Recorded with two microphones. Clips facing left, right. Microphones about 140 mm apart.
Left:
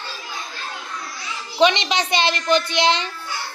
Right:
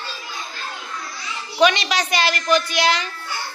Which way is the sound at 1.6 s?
25° left (ahead or behind).